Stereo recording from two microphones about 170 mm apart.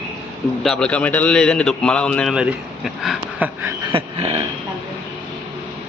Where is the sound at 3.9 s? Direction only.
35° right (ahead or behind).